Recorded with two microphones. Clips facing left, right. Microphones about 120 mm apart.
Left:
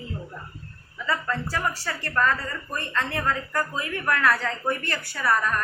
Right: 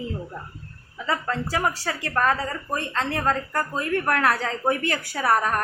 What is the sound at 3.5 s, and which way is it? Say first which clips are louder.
A woman's voice: right 3 dB; 50° right (ahead or behind).